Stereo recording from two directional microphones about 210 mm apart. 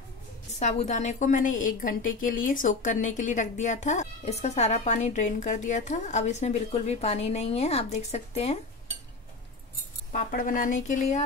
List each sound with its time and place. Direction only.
0.6 s a woman's voice: 35° left (ahead or behind)
10.1 s a woman's voice: 40° left (ahead or behind)